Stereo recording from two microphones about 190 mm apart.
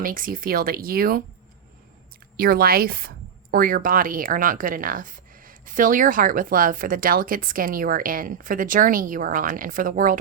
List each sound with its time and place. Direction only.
0.0 s speech: 45° right (ahead or behind)
2.3 s speech: 50° right (ahead or behind)